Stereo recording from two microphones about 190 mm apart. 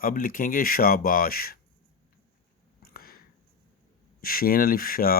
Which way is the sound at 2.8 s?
50° left (ahead or behind).